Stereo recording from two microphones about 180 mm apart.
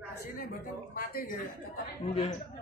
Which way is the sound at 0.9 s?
50° left (ahead or behind).